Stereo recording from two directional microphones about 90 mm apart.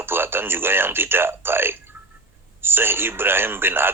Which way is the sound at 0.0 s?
25° right (ahead or behind).